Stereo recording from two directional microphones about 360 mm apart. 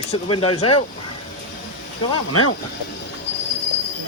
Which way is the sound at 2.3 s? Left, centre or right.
Left.